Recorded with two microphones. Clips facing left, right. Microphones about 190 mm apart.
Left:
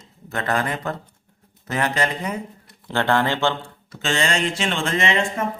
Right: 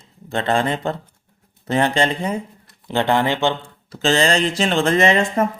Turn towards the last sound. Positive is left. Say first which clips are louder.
# right 6 dB
turn(degrees=-40)  # may be behind; listen again after turning